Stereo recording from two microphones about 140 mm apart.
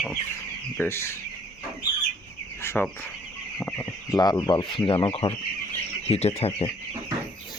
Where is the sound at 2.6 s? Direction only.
15° left (ahead or behind).